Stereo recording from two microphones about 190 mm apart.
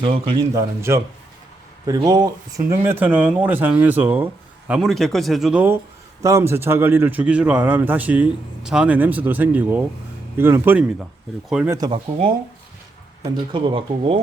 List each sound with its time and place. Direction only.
0.0 s speech: 25° right (ahead or behind)
0.8 s a man's voice: 15° right (ahead or behind)
11.7 s speech: 20° right (ahead or behind)
13.3 s speech: 25° right (ahead or behind)